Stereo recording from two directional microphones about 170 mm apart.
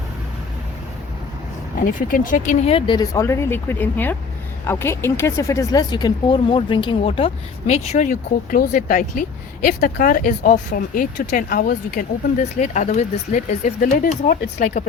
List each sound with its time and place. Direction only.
1.8 s speech: 50° left (ahead or behind)
2.7 s speech: 25° left (ahead or behind)
7.7 s speech: 40° left (ahead or behind); by 11.8 s 60° left (ahead or behind)
11.9 s speech: 45° left (ahead or behind)
13.9 s speech: 60° left (ahead or behind)